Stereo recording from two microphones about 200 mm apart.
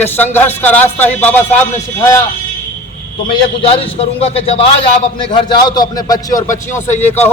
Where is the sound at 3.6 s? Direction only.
30° left (ahead or behind).